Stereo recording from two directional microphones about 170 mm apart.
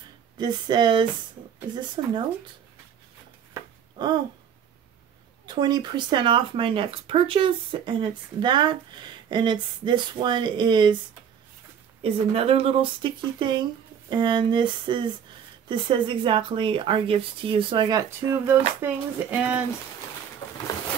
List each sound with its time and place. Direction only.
0.4 s speech: 25° right (ahead or behind)
5.5 s speech: 25° right (ahead or behind)
12.0 s speech: 35° right (ahead or behind); by 19.6 s 10° right (ahead or behind)
20.4 s a sound: 15° left (ahead or behind)